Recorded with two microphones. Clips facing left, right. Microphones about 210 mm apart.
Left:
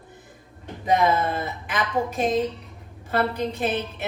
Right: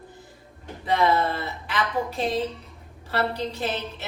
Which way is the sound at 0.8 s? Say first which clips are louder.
Left 1 dB; 15° left (ahead or behind).